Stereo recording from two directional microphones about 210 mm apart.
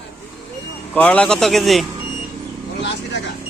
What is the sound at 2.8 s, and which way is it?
Vehicle, 55° left (ahead or behind).